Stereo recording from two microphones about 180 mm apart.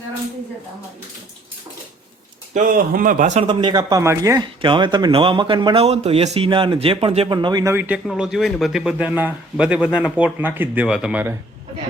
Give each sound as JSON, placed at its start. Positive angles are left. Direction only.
{"t": 2.5, "sound": "speech", "side_deg": -50}
{"t": 3.4, "sound": "a man's voice", "side_deg": -25}